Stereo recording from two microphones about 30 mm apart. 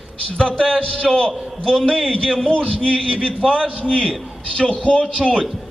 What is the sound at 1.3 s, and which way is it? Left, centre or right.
Speech, centre.